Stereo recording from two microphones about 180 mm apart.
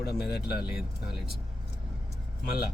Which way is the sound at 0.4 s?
60° left (ahead or behind).